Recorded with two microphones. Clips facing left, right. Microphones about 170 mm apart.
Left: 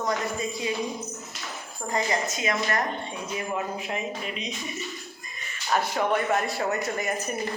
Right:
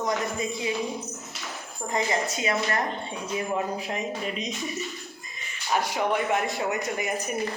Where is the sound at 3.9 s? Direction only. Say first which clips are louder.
Right 1 dB; 40° right (ahead or behind).